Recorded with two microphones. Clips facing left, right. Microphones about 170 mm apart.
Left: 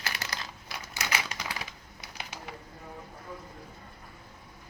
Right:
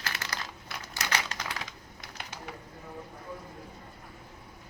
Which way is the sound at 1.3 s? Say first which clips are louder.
Even; 10° left (ahead or behind).